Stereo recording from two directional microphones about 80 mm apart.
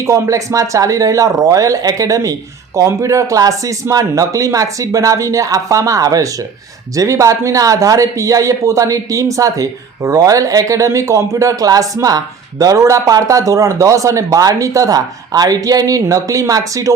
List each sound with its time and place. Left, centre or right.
0.0 s speech: right